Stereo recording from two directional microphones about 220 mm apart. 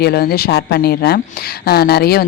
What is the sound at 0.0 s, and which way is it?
Speech, 45° left (ahead or behind).